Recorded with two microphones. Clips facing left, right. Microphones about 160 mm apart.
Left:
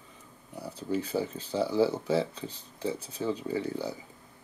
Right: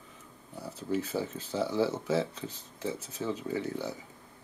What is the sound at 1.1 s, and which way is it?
Speech, 10° left (ahead or behind).